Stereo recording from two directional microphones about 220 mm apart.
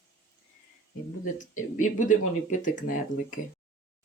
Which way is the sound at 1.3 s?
35° left (ahead or behind).